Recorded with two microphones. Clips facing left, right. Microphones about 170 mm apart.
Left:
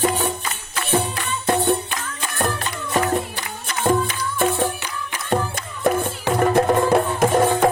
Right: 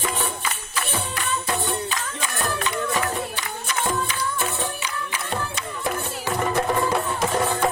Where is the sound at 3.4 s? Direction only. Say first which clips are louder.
Left 1 dB; 55° left (ahead or behind).